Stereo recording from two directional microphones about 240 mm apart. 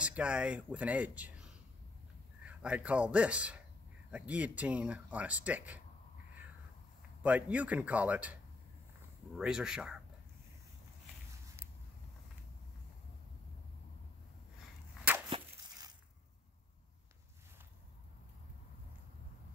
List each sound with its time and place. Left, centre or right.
0.0 s a man's voice: centre
7.2 s speech: centre
9.4 s speech: centre
15.2 s whip: centre